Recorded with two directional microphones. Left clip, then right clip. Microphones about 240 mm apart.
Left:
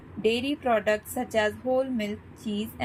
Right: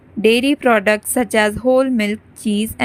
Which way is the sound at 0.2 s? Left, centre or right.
Right.